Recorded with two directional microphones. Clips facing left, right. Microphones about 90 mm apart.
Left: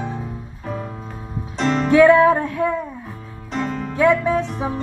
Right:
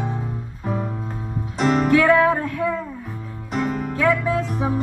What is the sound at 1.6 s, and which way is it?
Music, 10° right (ahead or behind).